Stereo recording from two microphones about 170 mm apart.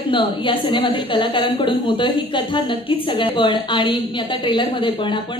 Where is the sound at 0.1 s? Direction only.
30° left (ahead or behind).